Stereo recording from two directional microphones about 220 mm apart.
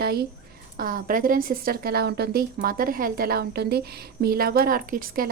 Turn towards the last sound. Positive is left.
turn(degrees=-40)  # may be behind; listen again after turning